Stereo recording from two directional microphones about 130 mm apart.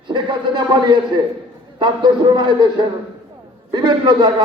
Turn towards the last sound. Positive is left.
turn(degrees=-35)  # may be behind; listen again after turning